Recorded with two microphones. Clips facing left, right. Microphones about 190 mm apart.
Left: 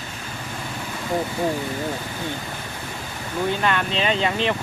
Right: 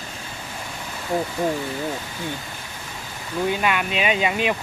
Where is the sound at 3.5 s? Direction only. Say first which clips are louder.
Even; 10° right (ahead or behind).